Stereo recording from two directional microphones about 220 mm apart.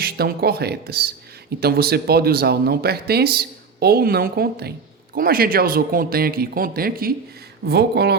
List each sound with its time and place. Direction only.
0.0 s a man's voice: 45° right (ahead or behind)